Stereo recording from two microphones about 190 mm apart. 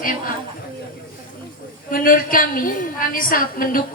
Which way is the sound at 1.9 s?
45° left (ahead or behind).